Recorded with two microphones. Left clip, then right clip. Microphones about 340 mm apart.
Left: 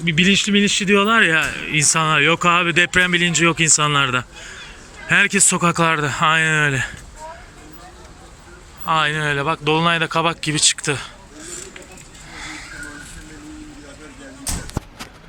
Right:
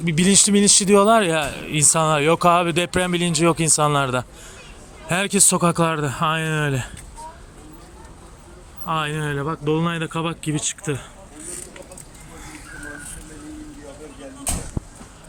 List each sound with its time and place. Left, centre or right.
0.0 s speech: centre
8.9 s speech: centre
14.8 s a sound: left